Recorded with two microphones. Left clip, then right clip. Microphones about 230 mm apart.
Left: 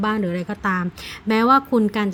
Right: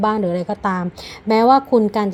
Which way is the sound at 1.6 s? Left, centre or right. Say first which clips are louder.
Right 4 dB; left.